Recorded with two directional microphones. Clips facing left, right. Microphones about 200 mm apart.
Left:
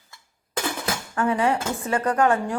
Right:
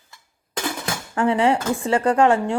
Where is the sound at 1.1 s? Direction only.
25° right (ahead or behind).